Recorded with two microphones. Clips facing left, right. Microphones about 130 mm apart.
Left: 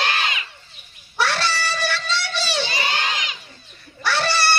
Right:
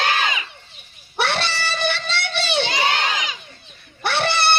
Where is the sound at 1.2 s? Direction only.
60° right (ahead or behind).